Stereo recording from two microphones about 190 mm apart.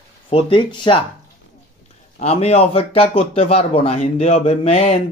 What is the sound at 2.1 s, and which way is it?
A man's voice, 35° left (ahead or behind).